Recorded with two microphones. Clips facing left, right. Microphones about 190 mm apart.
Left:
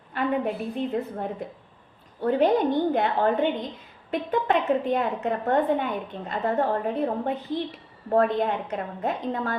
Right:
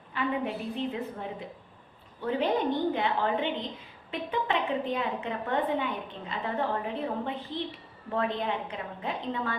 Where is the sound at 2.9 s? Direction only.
45° left (ahead or behind).